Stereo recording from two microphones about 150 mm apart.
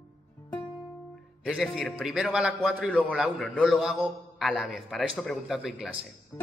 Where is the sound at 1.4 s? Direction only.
Centre (ahead or behind).